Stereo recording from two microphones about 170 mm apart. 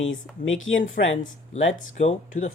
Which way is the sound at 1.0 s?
70° left (ahead or behind).